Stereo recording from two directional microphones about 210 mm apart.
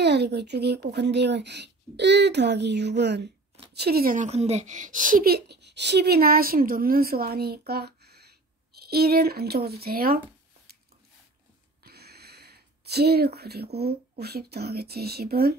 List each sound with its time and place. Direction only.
0.0 s a woman's voice: 50° right (ahead or behind)
11.8 s a sound: 50° right (ahead or behind)
14.2 s a woman's voice: 50° right (ahead or behind)